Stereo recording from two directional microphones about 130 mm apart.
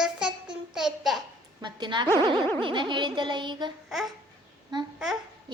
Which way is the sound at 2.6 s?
40° right (ahead or behind).